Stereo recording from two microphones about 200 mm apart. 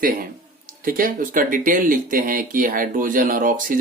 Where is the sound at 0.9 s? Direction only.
45° right (ahead or behind).